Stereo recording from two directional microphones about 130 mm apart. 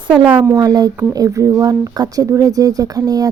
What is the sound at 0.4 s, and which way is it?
Speech, 30° right (ahead or behind).